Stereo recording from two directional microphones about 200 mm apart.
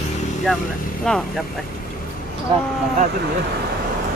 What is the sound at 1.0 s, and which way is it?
Speech, 5° left (ahead or behind).